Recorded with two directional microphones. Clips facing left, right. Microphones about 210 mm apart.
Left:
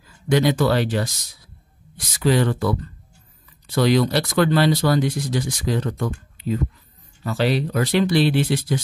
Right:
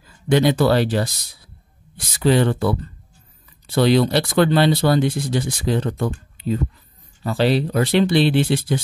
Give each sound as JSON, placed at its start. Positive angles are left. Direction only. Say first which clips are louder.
{"t": 0.3, "sound": "speech", "louder": "right 2 dB", "side_deg": -30}